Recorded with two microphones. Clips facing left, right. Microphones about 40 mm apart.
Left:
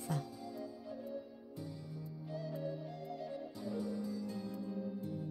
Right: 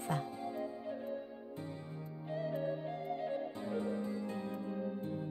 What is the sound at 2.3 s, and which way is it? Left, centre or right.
Music, right.